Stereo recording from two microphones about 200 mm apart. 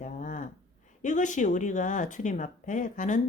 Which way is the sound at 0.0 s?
40° left (ahead or behind).